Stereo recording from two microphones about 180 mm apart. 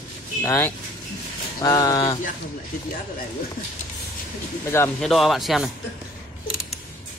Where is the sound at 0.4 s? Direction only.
15° left (ahead or behind).